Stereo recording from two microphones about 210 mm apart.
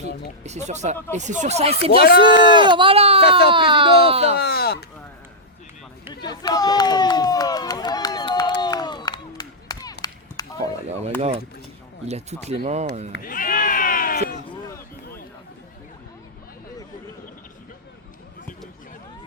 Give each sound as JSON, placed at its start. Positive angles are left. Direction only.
{"t": 0.4, "sound": "speech", "side_deg": -35}
{"t": 4.4, "sound": "speech", "side_deg": 50}
{"t": 6.2, "sound": "run", "side_deg": 20}
{"t": 10.6, "sound": "a sound", "side_deg": -30}
{"t": 11.2, "sound": "speech", "side_deg": -30}
{"t": 13.2, "sound": "a sound", "side_deg": 40}